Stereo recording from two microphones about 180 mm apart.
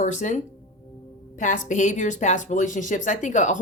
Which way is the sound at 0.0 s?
40° left (ahead or behind).